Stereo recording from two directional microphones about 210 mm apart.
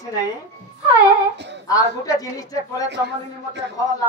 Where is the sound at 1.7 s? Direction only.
15° left (ahead or behind).